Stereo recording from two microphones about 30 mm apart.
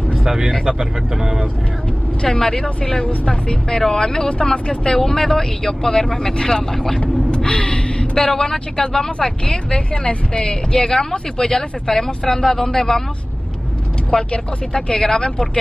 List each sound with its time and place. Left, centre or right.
0.7 s speech: right
2.2 s speech: centre
6.7 s speech: centre
7.2 s gasp: left
8.2 s speech: centre
10.7 s speech: centre
14.1 s speech: left